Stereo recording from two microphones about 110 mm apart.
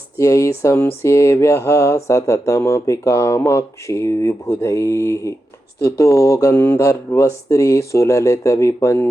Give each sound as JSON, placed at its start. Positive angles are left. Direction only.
{"t": 0.2, "sound": "speech", "side_deg": 30}